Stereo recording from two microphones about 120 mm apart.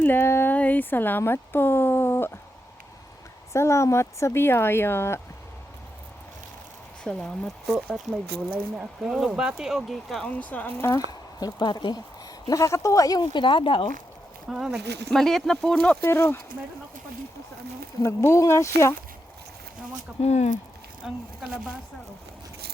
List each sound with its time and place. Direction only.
0.0 s speech: 20° left (ahead or behind)
3.5 s speech: 25° left (ahead or behind)
7.0 s speech: 5° left (ahead or behind)
8.5 s speech: 15° right (ahead or behind); by 11.0 s 20° left (ahead or behind)
11.3 s speech: 35° left (ahead or behind)
12.5 s speech: 30° left (ahead or behind); by 13.9 s 45° left (ahead or behind)
14.5 s speech: 5° right (ahead or behind)
16.0 s speech: 20° left (ahead or behind)
18.0 s speech: 25° left (ahead or behind)
20.2 s speech: 70° left (ahead or behind)
21.0 s speech: 5° right (ahead or behind)